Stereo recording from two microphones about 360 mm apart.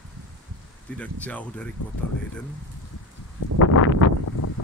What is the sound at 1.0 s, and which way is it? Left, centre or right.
Speech, centre.